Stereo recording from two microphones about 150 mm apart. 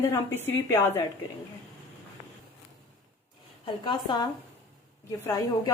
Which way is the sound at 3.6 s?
30° left (ahead or behind).